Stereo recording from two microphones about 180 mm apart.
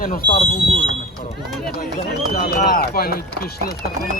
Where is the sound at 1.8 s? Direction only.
55° left (ahead or behind).